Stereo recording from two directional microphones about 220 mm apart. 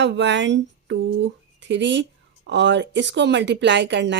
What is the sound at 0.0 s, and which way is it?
Speech, 55° right (ahead or behind).